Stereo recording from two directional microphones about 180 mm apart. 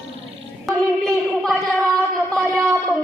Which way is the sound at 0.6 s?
Centre (ahead or behind).